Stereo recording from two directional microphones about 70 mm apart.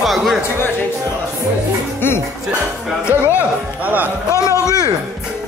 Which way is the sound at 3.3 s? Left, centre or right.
Right.